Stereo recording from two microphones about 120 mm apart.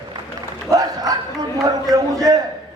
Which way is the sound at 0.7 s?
30° right (ahead or behind).